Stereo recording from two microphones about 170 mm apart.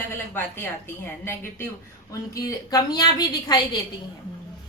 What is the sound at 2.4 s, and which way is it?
A woman's voice, 20° left (ahead or behind).